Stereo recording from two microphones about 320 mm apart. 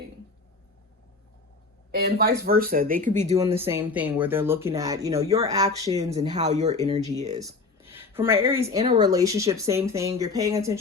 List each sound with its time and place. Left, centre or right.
1.9 s speech: right
3.3 s speech: centre
7.1 s a sound: right
8.4 s speech: centre